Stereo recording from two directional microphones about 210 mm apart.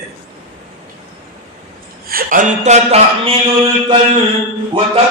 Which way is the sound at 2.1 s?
40° right (ahead or behind).